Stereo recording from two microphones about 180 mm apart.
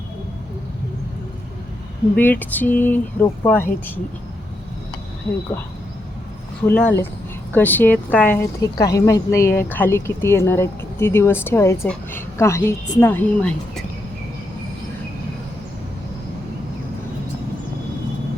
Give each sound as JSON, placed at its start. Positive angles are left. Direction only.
{"t": 2.1, "sound": "speech", "side_deg": 10}
{"t": 6.6, "sound": "speech", "side_deg": 5}